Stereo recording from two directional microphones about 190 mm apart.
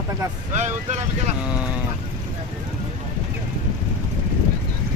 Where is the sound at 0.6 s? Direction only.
40° right (ahead or behind).